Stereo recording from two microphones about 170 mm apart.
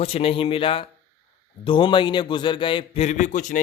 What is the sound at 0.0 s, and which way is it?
A man's voice, 35° left (ahead or behind).